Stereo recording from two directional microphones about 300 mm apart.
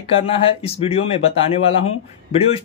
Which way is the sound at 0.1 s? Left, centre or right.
Centre.